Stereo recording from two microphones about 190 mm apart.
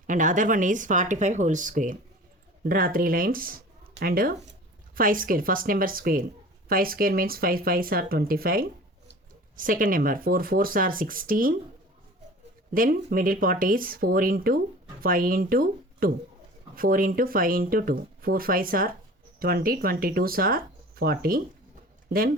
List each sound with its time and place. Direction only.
0.1 s speech: 40° right (ahead or behind)
12.7 s speech: 50° right (ahead or behind)